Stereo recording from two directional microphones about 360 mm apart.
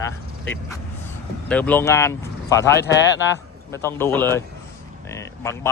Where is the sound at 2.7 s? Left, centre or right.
Left.